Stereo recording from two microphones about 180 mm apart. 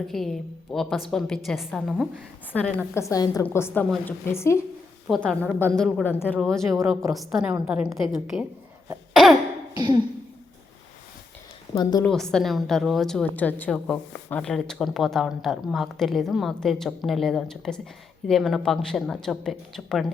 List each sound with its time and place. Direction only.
0.1 s a woman's voice: centre (ahead or behind)
5.0 s a woman's voice: centre (ahead or behind)
9.7 s speech: 20° right (ahead or behind)
11.7 s speech: 20° left (ahead or behind)
12.0 s a woman's voice: 5° left (ahead or behind)